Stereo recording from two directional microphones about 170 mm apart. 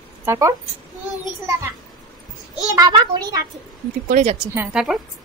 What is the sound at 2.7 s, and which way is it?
Speech, 25° right (ahead or behind).